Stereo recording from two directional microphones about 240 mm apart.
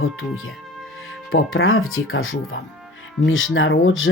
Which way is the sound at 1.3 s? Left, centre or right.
Left.